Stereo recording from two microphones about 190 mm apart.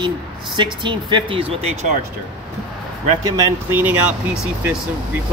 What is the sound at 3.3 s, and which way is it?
Speech, 15° right (ahead or behind).